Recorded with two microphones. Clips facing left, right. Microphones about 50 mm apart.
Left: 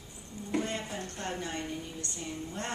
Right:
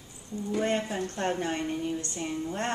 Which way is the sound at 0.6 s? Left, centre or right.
Right.